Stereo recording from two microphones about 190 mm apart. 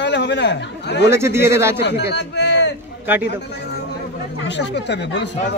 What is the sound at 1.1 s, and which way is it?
Speech, 15° right (ahead or behind).